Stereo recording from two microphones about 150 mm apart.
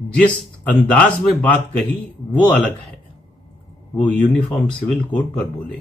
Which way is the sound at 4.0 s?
10° left (ahead or behind).